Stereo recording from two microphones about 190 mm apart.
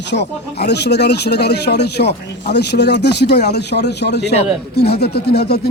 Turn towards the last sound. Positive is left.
turn(degrees=60)  # may be behind; listen again after turning